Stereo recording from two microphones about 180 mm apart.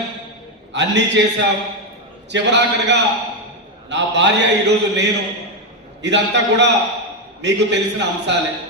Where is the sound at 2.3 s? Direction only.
75° right (ahead or behind).